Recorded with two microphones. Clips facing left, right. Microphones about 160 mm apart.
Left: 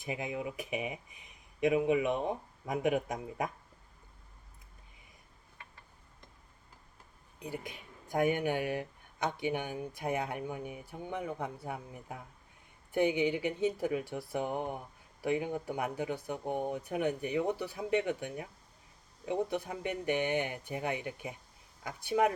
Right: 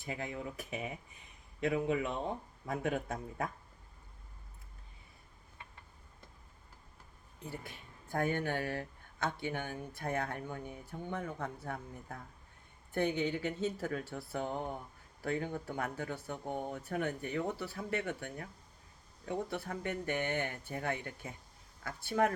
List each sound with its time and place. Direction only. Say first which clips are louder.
0.0 s speech: left 4 dB; 15° left (ahead or behind)
7.3 s speech: left 4 dB; 15° left (ahead or behind)